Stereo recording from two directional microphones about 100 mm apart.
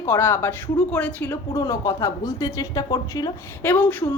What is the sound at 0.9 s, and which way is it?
Speech, 15° left (ahead or behind).